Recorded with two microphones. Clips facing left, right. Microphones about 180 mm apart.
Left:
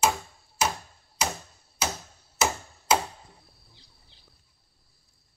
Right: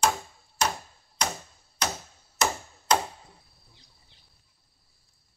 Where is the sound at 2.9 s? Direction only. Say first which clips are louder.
Even; 5° left (ahead or behind).